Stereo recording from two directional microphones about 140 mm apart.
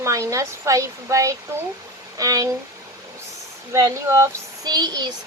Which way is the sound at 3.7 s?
20° right (ahead or behind).